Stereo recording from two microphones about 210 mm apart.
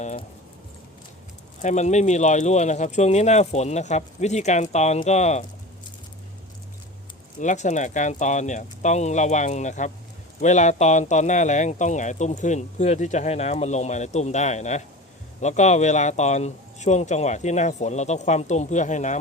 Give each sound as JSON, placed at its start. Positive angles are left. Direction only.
{"t": 0.0, "sound": "a sound", "side_deg": 35}
{"t": 1.6, "sound": "speech", "side_deg": 35}
{"t": 7.3, "sound": "speech", "side_deg": 35}